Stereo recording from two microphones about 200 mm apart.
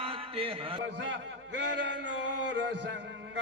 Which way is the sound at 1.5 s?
60° right (ahead or behind).